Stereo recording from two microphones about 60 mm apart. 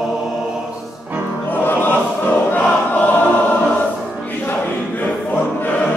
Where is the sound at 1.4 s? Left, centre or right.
Left.